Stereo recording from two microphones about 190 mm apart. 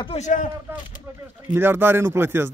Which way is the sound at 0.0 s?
35° left (ahead or behind).